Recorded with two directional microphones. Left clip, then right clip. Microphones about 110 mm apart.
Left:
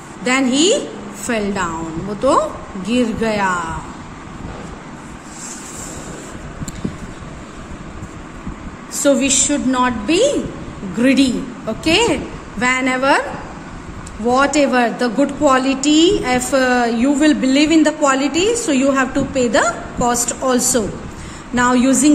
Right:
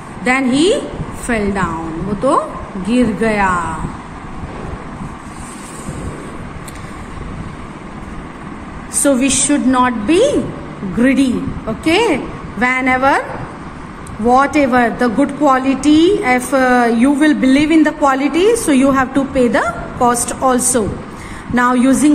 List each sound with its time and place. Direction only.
0.2 s a woman's voice: 15° left (ahead or behind)
2.9 s speech: 20° left (ahead or behind)
9.0 s a woman's voice: centre (ahead or behind)
14.2 s a woman's voice: centre (ahead or behind)